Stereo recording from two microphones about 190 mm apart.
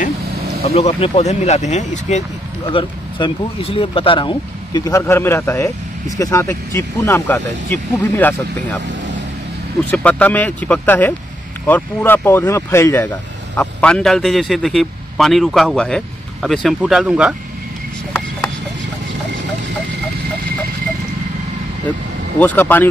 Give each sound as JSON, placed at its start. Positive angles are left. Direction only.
{"t": 0.7, "sound": "speech", "side_deg": 35}
{"t": 2.7, "sound": "speech", "side_deg": 25}
{"t": 9.8, "sound": "a man's voice", "side_deg": 5}
{"t": 22.4, "sound": "speech", "side_deg": 10}